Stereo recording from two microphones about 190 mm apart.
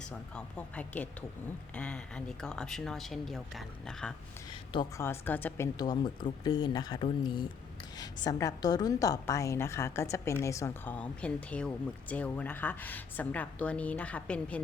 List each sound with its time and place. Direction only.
0.0 s a woman's voice: 5° left (ahead or behind)
4.7 s speech: 25° left (ahead or behind)
5.0 s a woman's voice: 10° left (ahead or behind)